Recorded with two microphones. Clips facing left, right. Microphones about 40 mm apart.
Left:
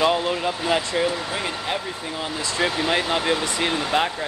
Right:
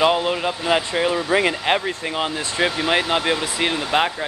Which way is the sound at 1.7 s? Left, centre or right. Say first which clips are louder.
Right 6 dB; right.